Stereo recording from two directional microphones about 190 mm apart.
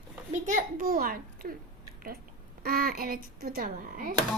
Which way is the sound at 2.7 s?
50° right (ahead or behind).